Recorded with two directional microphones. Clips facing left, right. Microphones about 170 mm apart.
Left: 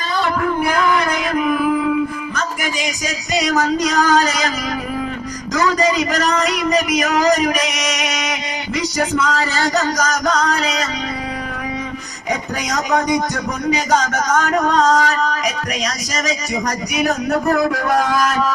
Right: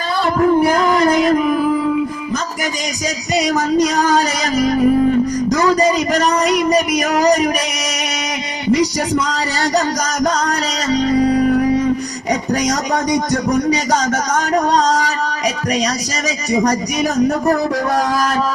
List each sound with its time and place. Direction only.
0.3 s music: 35° right (ahead or behind)
3.8 s music: 35° right (ahead or behind)
5.5 s a man's voice: 35° right (ahead or behind)
6.1 s music: 35° right (ahead or behind)
8.7 s music: 35° right (ahead or behind)
14.0 s music: 35° right (ahead or behind)
14.9 s a sound: 50° left (ahead or behind)